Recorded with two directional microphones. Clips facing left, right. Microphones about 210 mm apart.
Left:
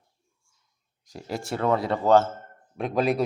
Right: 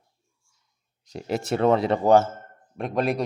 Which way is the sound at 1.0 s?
20° right (ahead or behind).